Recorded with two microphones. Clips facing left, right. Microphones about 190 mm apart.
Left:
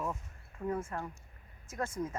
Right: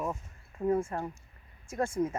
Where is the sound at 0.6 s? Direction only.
25° right (ahead or behind).